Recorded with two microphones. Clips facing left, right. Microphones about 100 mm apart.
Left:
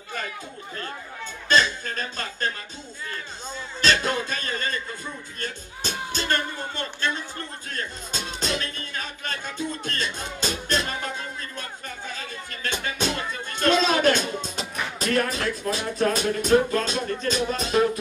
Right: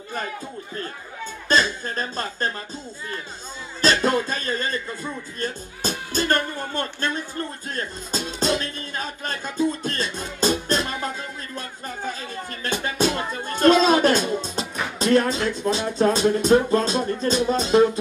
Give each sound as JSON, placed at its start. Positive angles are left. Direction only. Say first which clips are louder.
{"t": 1.5, "sound": "speech", "louder": "right 1 dB", "side_deg": -35}
{"t": 3.8, "sound": "music", "louder": "right 4 dB", "side_deg": -35}
{"t": 12.1, "sound": "music", "louder": "right 5 dB", "side_deg": -35}